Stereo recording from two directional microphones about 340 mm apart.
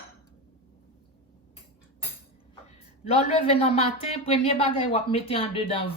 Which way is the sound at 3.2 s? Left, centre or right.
Centre.